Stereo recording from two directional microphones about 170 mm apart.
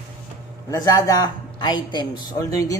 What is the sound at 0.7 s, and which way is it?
Speech, 20° left (ahead or behind).